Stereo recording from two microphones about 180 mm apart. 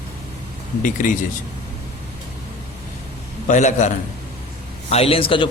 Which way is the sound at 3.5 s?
45° left (ahead or behind).